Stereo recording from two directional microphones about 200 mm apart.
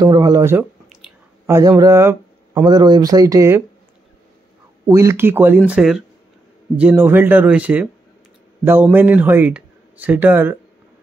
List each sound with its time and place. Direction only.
0.0 s speech: 20° right (ahead or behind)
4.8 s speech: 15° right (ahead or behind)